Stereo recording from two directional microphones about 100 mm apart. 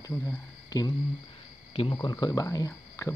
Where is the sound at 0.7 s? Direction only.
40° left (ahead or behind).